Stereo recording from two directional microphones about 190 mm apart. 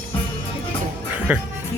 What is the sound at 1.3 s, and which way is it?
Speech, 10° right (ahead or behind).